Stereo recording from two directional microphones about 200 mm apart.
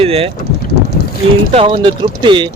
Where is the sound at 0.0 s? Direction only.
30° right (ahead or behind).